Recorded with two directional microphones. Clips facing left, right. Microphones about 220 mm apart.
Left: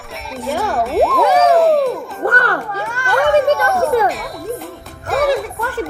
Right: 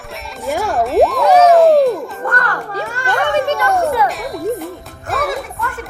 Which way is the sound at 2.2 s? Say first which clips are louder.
Left 3 dB; 30° left (ahead or behind).